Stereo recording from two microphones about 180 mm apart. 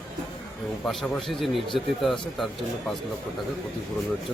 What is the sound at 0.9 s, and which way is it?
A man's voice, centre (ahead or behind).